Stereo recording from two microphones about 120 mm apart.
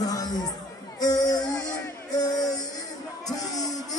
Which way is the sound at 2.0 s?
35° left (ahead or behind).